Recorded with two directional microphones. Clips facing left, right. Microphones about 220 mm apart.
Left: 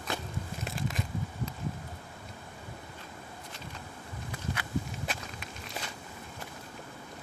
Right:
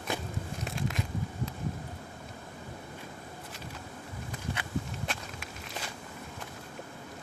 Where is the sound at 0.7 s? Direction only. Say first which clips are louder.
Right 1 dB; centre (ahead or behind).